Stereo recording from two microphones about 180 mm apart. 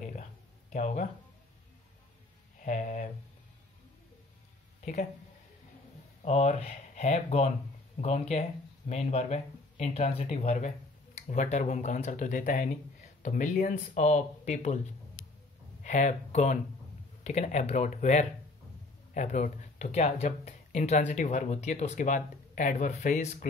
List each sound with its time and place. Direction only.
0.7 s speech: 40° left (ahead or behind)
2.6 s speech: 45° left (ahead or behind)
6.2 s speech: 35° left (ahead or behind)
15.8 s speech: 45° left (ahead or behind)